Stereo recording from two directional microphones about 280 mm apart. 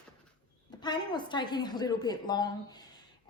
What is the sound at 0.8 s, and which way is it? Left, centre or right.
A woman's voice, centre.